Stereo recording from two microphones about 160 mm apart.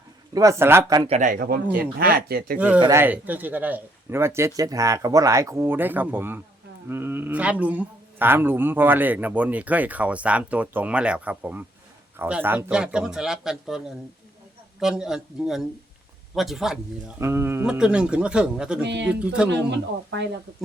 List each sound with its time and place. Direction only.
0.3 s speech: 20° right (ahead or behind)
1.0 s a man's voice: 40° right (ahead or behind)
1.3 s speech: 70° right (ahead or behind)
2.6 s speech: 10° right (ahead or behind)
17.2 s speech: 15° right (ahead or behind)